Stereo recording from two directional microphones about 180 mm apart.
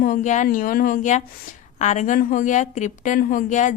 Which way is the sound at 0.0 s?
45° left (ahead or behind).